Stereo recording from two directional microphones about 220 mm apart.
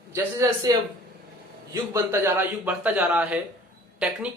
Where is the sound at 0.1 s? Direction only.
10° right (ahead or behind).